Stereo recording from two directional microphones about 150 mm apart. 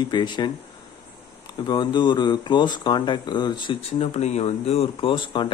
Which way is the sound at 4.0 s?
45° left (ahead or behind).